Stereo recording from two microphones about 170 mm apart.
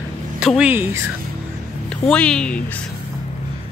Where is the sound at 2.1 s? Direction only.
5° left (ahead or behind).